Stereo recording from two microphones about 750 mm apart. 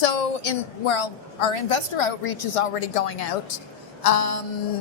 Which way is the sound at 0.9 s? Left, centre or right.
Left.